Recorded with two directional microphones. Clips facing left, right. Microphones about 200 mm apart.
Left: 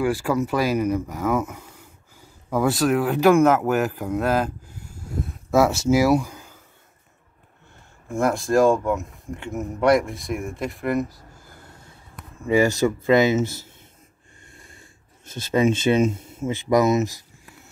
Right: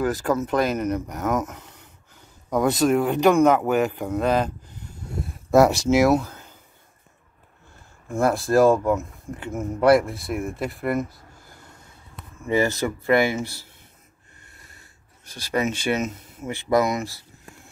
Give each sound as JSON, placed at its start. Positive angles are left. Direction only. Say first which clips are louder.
{"t": 0.0, "sound": "speech", "louder": "left 1 dB", "side_deg": 10}
{"t": 8.1, "sound": "speech", "louder": "even", "side_deg": 0}
{"t": 12.4, "sound": "speech", "louder": "left 3 dB", "side_deg": 15}
{"t": 14.6, "sound": "speech", "louder": "left 4 dB", "side_deg": 25}